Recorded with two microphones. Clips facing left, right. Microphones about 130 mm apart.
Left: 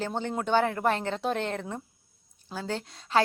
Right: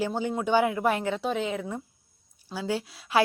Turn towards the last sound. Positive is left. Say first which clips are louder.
# right 1 dB
turn(degrees=-10)  # may be behind; listen again after turning